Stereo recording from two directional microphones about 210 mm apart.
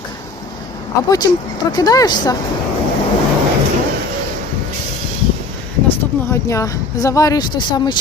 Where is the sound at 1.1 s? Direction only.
15° left (ahead or behind).